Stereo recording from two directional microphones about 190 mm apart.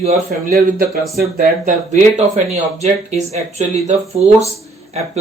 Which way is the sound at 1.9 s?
35° right (ahead or behind).